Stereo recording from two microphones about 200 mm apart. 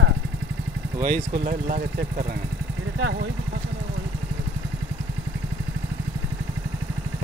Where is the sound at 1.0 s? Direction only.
40° right (ahead or behind).